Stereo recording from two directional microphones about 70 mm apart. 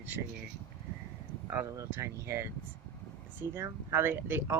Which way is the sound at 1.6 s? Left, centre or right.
Right.